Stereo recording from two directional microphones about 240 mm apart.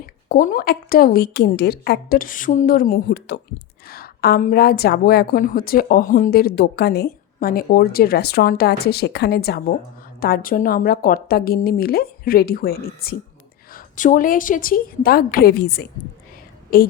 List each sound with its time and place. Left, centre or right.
0.0 s a woman's voice: left